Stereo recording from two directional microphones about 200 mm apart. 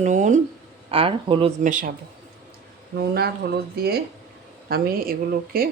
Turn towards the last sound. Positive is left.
turn(degrees=-45)  # may be behind; listen again after turning